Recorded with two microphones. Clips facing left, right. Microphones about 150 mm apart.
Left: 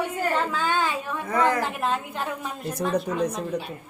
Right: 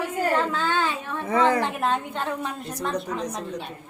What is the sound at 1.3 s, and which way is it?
Speech, 25° right (ahead or behind).